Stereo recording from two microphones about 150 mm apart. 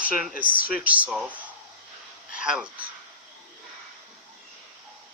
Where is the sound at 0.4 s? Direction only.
65° left (ahead or behind).